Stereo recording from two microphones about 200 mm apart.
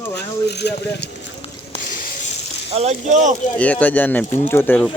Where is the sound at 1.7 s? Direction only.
40° left (ahead or behind).